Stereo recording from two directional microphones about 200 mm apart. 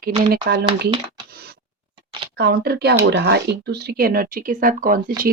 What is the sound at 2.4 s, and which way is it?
Speech, 55° right (ahead or behind).